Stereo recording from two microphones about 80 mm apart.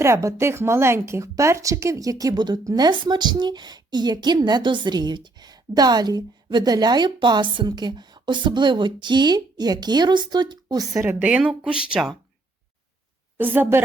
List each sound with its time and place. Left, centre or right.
0.0 s speech: right
2.3 s a woman's voice: right
10.9 s speech: right
11.2 s speech: centre
13.3 s a woman's voice: right